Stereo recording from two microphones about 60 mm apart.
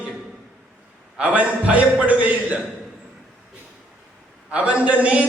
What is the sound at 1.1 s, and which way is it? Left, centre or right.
Speech, right.